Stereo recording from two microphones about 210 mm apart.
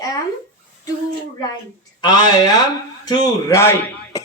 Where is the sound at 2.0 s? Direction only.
20° left (ahead or behind).